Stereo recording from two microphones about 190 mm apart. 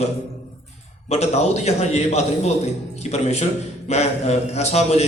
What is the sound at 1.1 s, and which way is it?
A man's voice, 35° left (ahead or behind).